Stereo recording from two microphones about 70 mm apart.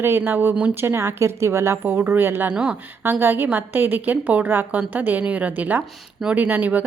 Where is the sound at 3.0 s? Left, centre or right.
Right.